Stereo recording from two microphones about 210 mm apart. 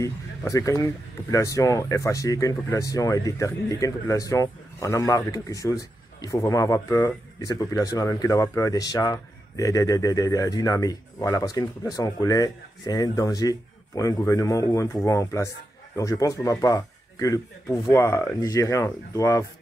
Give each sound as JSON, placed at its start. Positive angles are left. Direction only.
{"t": 0.5, "sound": "speech", "side_deg": 15}